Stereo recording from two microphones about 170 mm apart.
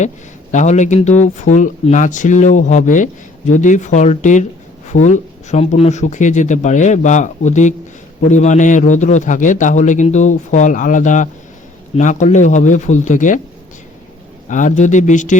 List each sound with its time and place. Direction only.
0.5 s a man's voice: 45° left (ahead or behind)
14.4 s a man's voice: 50° left (ahead or behind)